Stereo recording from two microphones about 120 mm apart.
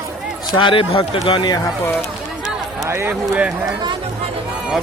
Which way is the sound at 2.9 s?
20° right (ahead or behind).